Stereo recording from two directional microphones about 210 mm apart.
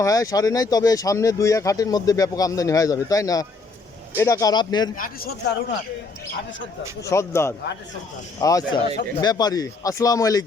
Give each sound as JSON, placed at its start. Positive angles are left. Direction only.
{"t": 0.0, "sound": "speech", "side_deg": 15}
{"t": 4.9, "sound": "a man's voice", "side_deg": 45}
{"t": 7.0, "sound": "speech", "side_deg": 15}